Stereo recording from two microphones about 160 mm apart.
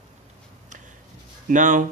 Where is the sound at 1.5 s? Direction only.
55° right (ahead or behind).